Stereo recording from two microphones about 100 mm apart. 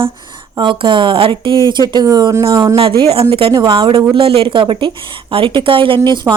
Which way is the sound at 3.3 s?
65° right (ahead or behind).